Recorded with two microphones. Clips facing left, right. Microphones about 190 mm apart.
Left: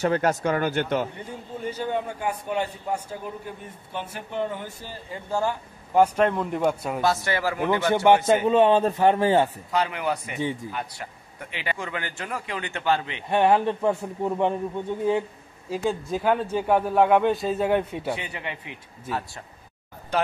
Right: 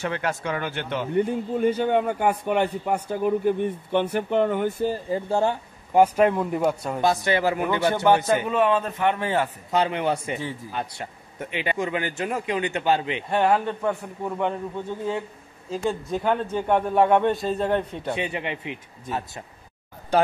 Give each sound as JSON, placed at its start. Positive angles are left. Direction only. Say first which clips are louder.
{"t": 0.0, "sound": "speech", "louder": "left 5 dB", "side_deg": 40}
{"t": 1.1, "sound": "a man's voice", "louder": "right 13 dB", "side_deg": -60}
{"t": 5.1, "sound": "speech", "louder": "even", "side_deg": -25}
{"t": 5.9, "sound": "a man's voice", "louder": "right 2 dB", "side_deg": -10}
{"t": 7.0, "sound": "speech", "louder": "right 3 dB", "side_deg": -15}
{"t": 7.9, "sound": "a man's voice", "louder": "left 3 dB", "side_deg": 20}
{"t": 9.7, "sound": "speech", "louder": "right 3 dB", "side_deg": -25}
{"t": 13.3, "sound": "a man's voice", "louder": "left 2 dB", "side_deg": 20}
{"t": 15.7, "sound": "a man's voice", "louder": "even", "side_deg": 5}
{"t": 18.1, "sound": "speech", "louder": "right 5 dB", "side_deg": -20}